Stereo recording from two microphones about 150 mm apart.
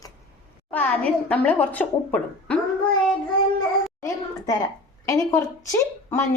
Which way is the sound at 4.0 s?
25° left (ahead or behind).